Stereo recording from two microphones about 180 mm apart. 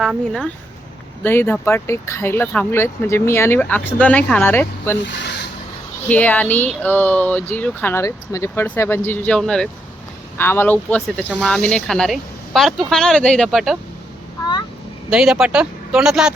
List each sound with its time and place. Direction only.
0.0 s speech: centre (ahead or behind)
1.2 s speech: 10° left (ahead or behind)
5.0 s speech: 75° left (ahead or behind)
6.1 s speech: 10° left (ahead or behind)
15.1 s speech: 5° right (ahead or behind)